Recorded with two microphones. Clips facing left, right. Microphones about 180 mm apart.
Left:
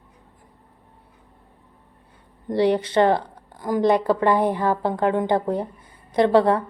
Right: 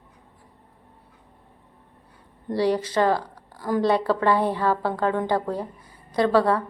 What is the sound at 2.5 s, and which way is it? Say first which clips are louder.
A woman's voice: left 3 dB; 20° left (ahead or behind).